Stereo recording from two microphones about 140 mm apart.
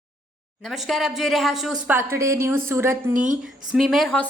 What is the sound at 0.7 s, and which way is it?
Speech, centre (ahead or behind).